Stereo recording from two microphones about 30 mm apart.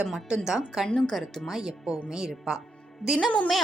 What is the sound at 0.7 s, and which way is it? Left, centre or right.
A woman's voice, centre.